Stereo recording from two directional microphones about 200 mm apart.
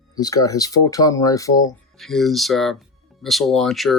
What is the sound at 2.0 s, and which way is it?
Speech, centre (ahead or behind).